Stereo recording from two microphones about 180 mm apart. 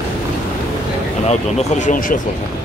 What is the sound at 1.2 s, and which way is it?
Speech, 40° left (ahead or behind).